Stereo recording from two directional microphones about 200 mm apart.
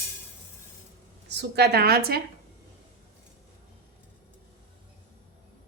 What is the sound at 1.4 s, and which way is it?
Speech, 55° right (ahead or behind).